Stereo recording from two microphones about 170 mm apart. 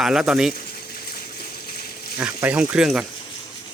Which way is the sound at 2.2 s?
10° right (ahead or behind).